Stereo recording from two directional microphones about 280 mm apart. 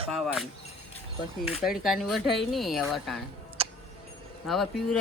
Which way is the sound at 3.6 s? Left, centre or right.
Right.